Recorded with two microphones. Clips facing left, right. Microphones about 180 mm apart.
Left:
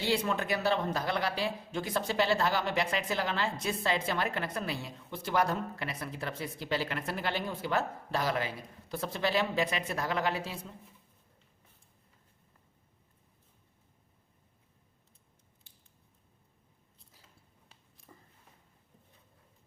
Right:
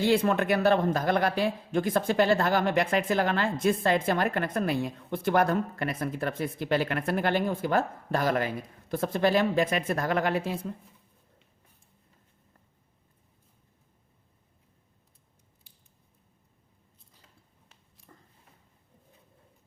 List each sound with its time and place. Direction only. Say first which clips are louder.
0.0 s a man's voice: right 7 dB; 55° right (ahead or behind)